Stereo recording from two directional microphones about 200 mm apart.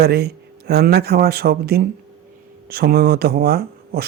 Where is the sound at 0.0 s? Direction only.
50° right (ahead or behind).